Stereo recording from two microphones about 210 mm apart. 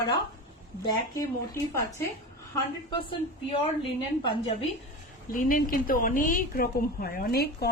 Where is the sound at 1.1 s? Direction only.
15° left (ahead or behind).